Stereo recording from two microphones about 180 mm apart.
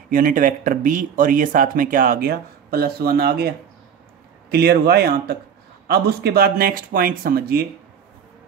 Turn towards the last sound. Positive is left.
turn(degrees=-55)  # may be behind; listen again after turning